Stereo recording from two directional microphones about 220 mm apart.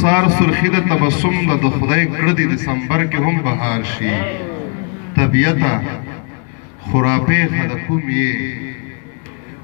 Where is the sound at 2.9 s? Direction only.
40° right (ahead or behind).